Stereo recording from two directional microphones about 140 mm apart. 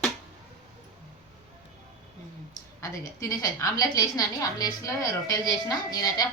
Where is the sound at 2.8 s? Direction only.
25° left (ahead or behind).